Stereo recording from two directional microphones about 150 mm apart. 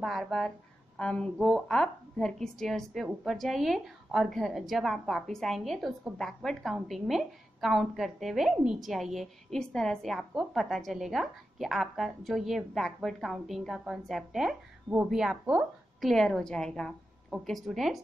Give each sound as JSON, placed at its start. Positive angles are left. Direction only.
{"t": 0.0, "sound": "a woman's voice", "side_deg": 0}